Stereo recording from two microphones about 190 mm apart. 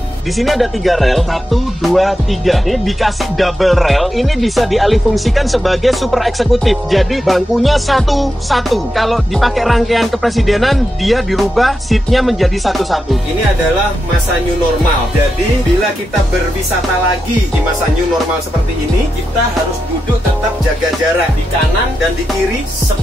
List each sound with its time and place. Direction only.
0.4 s speech: centre (ahead or behind)